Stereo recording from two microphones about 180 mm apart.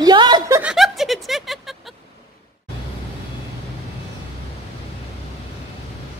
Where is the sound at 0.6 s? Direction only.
Centre (ahead or behind).